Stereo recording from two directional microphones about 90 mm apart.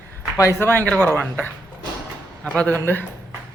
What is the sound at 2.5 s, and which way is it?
Speech, 20° left (ahead or behind).